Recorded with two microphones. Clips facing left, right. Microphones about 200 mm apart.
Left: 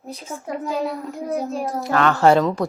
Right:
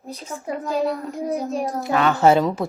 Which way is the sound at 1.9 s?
15° right (ahead or behind).